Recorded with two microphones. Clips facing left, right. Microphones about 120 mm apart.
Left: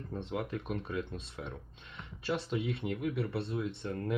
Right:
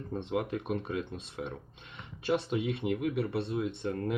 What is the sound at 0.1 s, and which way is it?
Speech, 20° right (ahead or behind).